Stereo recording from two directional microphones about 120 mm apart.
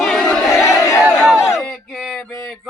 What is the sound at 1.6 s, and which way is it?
Male singing, 5° left (ahead or behind).